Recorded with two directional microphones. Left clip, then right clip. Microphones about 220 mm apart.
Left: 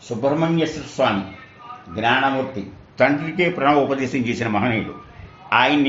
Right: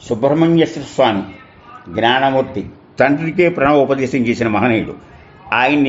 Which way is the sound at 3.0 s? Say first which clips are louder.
Right 5 dB; 45° right (ahead or behind).